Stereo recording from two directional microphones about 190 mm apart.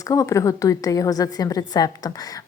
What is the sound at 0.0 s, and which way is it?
A woman's voice, 15° left (ahead or behind).